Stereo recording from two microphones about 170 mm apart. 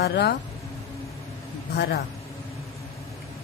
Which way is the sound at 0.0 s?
70° left (ahead or behind).